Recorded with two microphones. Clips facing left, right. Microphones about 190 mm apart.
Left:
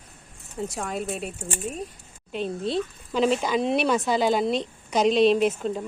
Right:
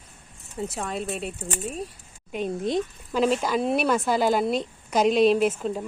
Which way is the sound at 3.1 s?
5° right (ahead or behind).